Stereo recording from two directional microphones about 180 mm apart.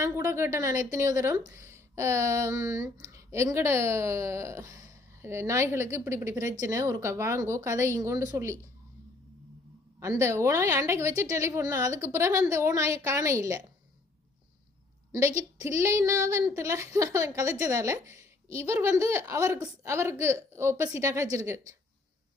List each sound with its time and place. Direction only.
0.0 s a woman's voice: 10° right (ahead or behind)
10.0 s a woman's voice: 15° right (ahead or behind)
15.1 s a woman's voice: 15° right (ahead or behind)